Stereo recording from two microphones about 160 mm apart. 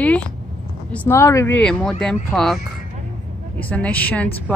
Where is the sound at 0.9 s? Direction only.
15° left (ahead or behind).